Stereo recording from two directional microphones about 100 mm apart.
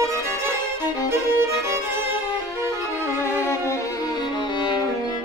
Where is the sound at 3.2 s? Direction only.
30° left (ahead or behind).